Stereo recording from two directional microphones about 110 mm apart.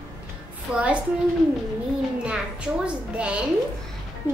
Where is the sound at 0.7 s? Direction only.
10° right (ahead or behind).